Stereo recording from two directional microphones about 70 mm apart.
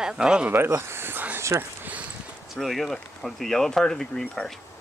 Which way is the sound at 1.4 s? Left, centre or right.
Right.